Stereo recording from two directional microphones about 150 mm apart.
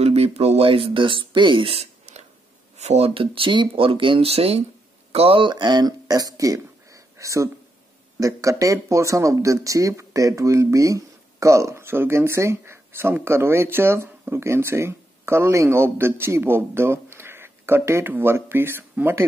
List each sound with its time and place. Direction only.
0.0 s speech: 45° right (ahead or behind); by 19.2 s 15° right (ahead or behind)